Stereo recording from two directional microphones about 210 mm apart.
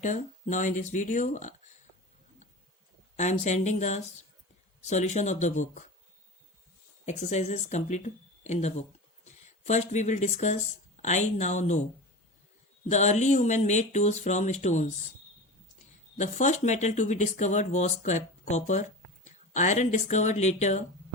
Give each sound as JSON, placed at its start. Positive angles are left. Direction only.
{"t": 0.0, "sound": "speech", "side_deg": 35}
{"t": 3.2, "sound": "speech", "side_deg": 35}
{"t": 7.0, "sound": "speech", "side_deg": 35}
{"t": 12.9, "sound": "speech", "side_deg": 35}
{"t": 16.1, "sound": "speech", "side_deg": 35}